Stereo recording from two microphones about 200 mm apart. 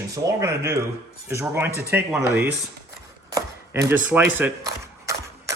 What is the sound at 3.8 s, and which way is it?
Speech, 10° right (ahead or behind).